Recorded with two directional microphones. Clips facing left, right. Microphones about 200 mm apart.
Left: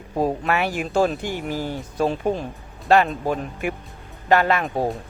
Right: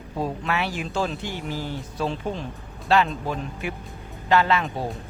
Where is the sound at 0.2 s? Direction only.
45° left (ahead or behind).